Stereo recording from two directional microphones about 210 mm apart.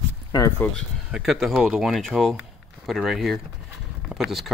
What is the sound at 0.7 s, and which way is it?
Speech, centre (ahead or behind).